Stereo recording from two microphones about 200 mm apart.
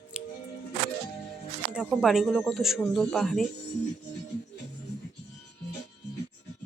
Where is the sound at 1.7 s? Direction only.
5° right (ahead or behind).